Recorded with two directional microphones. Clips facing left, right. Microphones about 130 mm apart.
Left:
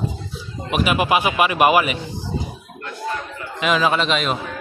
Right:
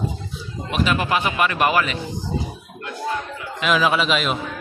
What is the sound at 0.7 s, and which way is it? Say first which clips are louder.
Speech: left 3 dB; 15° left (ahead or behind).